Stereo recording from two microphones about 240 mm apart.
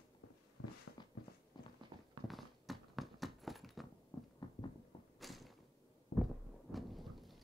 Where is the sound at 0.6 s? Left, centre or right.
Left.